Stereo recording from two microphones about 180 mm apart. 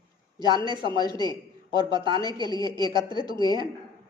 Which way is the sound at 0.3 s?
25° right (ahead or behind).